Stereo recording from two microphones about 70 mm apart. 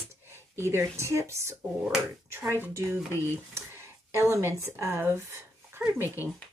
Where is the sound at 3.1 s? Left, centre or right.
Left.